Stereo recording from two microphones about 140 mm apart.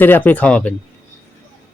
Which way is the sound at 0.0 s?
15° left (ahead or behind).